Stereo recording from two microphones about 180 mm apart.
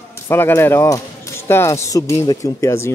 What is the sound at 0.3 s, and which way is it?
Speech, 15° left (ahead or behind).